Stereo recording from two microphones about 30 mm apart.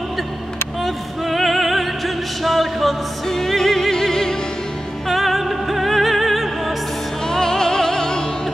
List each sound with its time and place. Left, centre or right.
0.8 s music: centre
3.9 s music: centre
5.0 s music: centre
7.2 s music: left